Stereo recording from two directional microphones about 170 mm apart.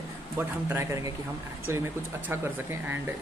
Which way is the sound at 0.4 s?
15° right (ahead or behind).